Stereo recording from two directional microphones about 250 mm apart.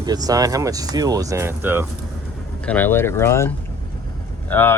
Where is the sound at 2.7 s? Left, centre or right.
Centre.